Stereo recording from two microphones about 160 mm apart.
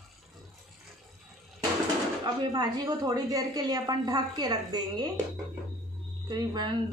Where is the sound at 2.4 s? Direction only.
25° right (ahead or behind).